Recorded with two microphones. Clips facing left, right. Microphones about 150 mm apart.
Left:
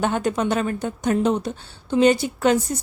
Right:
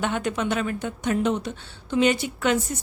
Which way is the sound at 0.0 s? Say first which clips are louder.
Left 4 dB; 40° left (ahead or behind).